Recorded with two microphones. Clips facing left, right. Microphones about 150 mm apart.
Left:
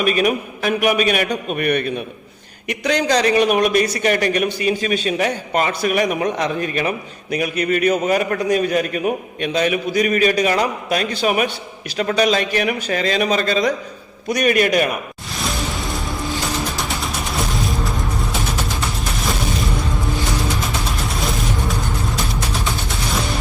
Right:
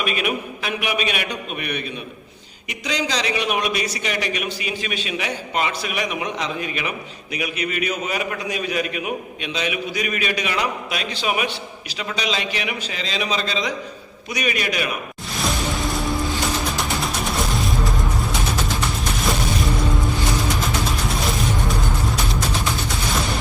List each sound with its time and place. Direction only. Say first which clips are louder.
0.0 s speech: left 6 dB; 40° left (ahead or behind)